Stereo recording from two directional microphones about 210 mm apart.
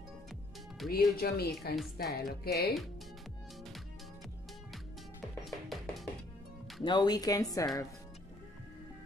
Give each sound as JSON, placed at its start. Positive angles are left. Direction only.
{"t": 0.8, "sound": "speech", "side_deg": 0}
{"t": 1.1, "sound": "speech", "side_deg": 45}
{"t": 5.4, "sound": "music", "side_deg": 0}
{"t": 6.8, "sound": "speech", "side_deg": 20}